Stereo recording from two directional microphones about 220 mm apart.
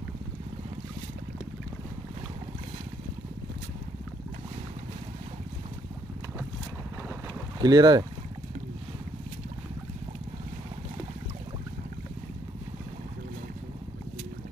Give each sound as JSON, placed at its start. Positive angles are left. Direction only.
{"t": 7.6, "sound": "speech", "side_deg": -20}